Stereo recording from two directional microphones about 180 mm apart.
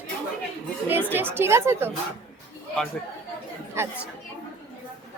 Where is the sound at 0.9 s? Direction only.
10° right (ahead or behind).